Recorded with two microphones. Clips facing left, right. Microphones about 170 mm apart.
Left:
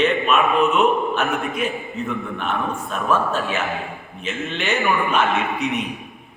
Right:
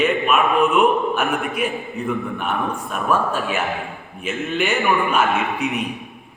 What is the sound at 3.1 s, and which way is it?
A man's voice, 10° right (ahead or behind).